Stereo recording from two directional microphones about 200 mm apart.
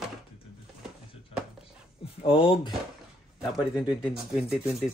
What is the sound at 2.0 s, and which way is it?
Speech, 25° left (ahead or behind).